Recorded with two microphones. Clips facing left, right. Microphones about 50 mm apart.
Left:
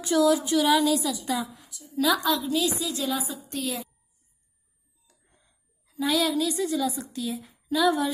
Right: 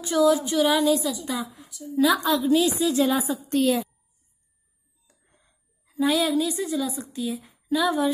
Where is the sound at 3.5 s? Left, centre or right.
Right.